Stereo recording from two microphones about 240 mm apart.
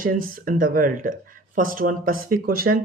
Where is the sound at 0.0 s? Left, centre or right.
Right.